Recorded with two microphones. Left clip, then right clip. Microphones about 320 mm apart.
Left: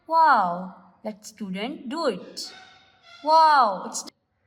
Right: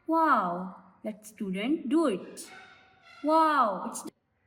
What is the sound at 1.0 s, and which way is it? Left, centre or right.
A woman's voice, left.